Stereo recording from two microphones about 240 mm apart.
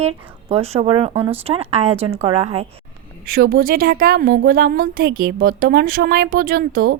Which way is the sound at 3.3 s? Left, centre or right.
Right.